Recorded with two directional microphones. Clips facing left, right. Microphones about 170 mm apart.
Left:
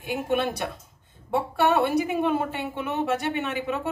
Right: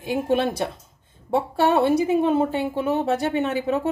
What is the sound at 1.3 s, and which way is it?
A woman's voice, 25° right (ahead or behind).